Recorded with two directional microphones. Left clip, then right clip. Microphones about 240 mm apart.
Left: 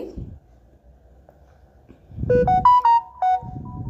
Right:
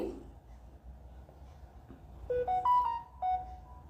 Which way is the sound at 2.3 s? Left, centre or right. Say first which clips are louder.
Left 15 dB; left.